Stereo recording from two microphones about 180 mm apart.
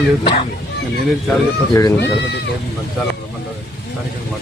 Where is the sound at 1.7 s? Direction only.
20° left (ahead or behind).